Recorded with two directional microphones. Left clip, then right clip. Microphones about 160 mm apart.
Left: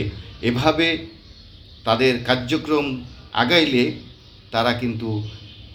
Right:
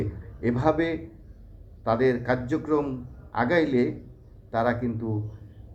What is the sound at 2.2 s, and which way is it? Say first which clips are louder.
Speech: left 6 dB; 25° left (ahead or behind).